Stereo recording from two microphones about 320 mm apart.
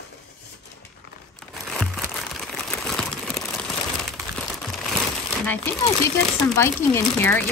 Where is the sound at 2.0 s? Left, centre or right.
Centre.